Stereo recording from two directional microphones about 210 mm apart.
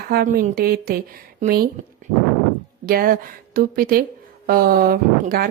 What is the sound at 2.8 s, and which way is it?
Speech, 45° right (ahead or behind).